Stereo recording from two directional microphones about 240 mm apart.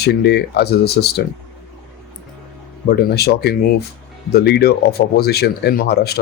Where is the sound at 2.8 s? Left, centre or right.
Left.